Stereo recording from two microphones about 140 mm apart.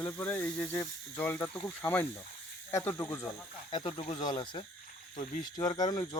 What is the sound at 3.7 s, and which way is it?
Speech, 40° left (ahead or behind).